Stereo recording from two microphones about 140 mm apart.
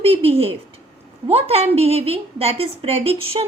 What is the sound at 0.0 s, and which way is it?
A woman's voice, 40° right (ahead or behind).